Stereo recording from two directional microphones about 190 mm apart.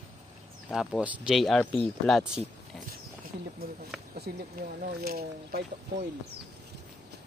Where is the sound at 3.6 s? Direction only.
50° right (ahead or behind).